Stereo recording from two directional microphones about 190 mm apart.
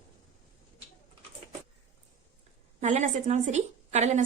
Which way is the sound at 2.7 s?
40° right (ahead or behind).